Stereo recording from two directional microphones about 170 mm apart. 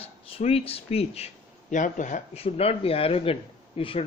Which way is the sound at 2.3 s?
35° left (ahead or behind).